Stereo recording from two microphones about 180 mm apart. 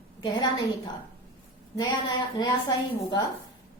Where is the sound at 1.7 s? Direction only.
25° left (ahead or behind).